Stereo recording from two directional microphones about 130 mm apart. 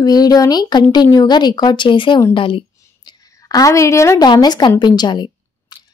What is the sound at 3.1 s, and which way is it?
A woman's voice, 30° left (ahead or behind).